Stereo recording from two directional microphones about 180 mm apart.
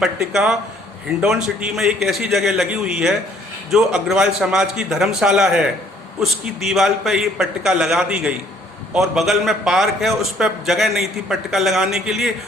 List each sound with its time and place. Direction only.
0.0 s a man's voice: centre (ahead or behind)